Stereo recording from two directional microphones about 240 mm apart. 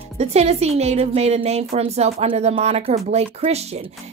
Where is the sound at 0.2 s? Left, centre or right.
Right.